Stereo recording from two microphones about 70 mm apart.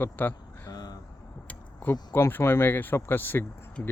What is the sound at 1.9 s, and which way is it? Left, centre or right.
Speech, left.